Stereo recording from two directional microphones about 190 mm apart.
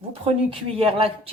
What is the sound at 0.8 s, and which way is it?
Speech, 30° right (ahead or behind).